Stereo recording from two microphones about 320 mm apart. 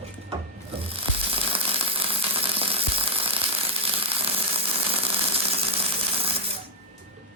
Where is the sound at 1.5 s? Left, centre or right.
Centre.